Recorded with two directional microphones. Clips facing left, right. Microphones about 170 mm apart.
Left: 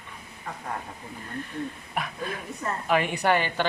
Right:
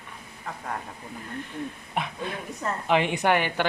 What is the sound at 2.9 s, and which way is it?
Speech, 20° right (ahead or behind).